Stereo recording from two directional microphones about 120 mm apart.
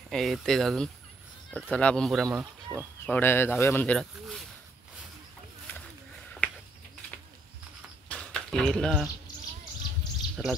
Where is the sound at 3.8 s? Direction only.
5° left (ahead or behind).